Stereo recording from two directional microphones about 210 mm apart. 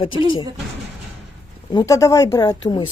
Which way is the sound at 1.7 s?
15° left (ahead or behind).